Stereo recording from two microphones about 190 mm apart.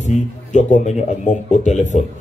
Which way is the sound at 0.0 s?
40° left (ahead or behind).